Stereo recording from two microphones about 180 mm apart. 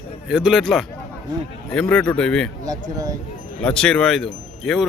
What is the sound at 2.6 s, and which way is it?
Speech, 20° right (ahead or behind).